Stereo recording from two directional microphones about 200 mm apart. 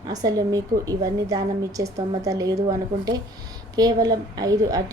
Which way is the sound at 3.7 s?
20° right (ahead or behind).